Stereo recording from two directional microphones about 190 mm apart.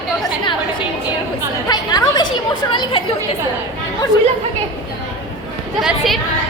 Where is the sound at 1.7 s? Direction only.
20° left (ahead or behind).